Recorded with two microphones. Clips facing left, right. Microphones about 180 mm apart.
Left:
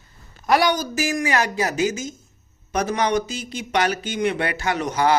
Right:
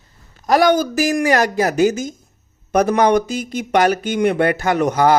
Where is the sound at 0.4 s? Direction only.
45° right (ahead or behind).